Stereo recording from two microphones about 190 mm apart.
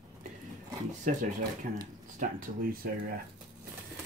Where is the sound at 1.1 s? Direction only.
40° right (ahead or behind).